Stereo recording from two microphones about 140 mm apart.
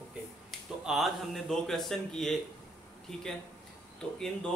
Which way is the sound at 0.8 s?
Centre (ahead or behind).